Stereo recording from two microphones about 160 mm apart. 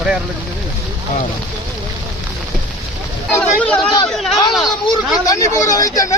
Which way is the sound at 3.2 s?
10° left (ahead or behind).